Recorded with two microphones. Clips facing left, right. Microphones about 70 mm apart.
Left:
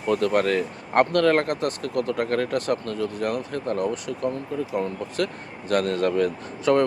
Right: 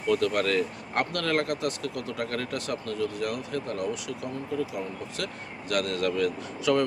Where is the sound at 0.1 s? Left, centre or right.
Left.